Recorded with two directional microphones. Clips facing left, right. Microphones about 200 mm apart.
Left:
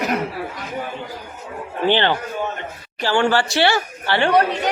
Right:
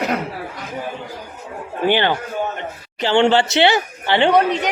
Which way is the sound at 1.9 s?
15° right (ahead or behind).